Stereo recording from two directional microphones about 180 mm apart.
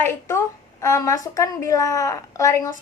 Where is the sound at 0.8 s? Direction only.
20° left (ahead or behind).